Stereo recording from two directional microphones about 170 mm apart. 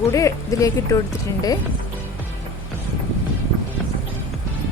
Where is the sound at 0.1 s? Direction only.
20° left (ahead or behind).